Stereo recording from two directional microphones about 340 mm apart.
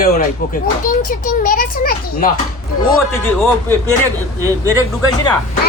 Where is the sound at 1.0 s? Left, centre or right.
Left.